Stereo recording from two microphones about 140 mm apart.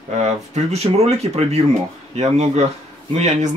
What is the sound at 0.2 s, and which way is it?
Speech, 50° right (ahead or behind).